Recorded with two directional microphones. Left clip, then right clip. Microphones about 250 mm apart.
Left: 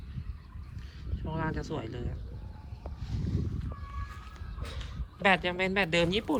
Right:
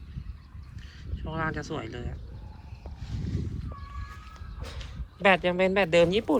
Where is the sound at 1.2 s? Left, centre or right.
Centre.